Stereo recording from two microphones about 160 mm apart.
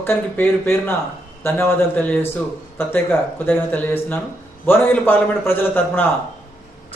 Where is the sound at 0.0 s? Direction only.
15° left (ahead or behind).